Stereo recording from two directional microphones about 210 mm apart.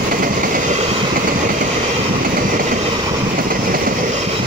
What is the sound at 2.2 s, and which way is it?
Train, 40° right (ahead or behind).